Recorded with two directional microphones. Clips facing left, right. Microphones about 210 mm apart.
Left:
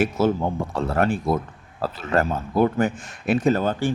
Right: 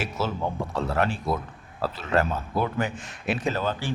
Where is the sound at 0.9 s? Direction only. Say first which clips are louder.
Left 6 dB; 50° left (ahead or behind).